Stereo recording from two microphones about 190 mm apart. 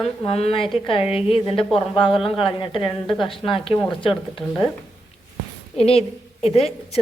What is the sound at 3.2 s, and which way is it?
Speech, 25° left (ahead or behind).